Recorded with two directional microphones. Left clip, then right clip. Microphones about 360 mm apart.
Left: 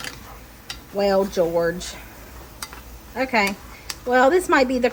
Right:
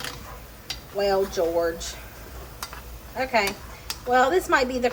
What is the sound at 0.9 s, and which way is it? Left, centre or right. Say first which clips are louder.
A woman's voice: left 4 dB; left.